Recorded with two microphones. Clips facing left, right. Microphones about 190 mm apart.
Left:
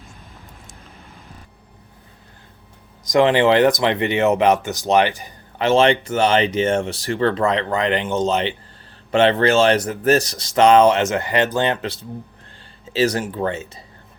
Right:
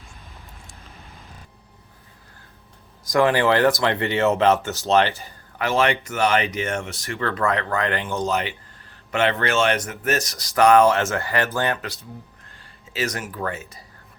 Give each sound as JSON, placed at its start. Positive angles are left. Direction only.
{"t": 3.1, "sound": "speech", "side_deg": 20}